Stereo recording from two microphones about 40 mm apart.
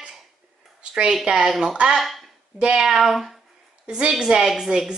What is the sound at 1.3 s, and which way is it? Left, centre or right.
Speech, centre.